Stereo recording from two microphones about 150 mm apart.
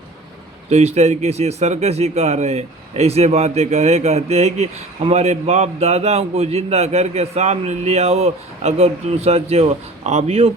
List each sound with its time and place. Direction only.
0.7 s speech: 45° right (ahead or behind)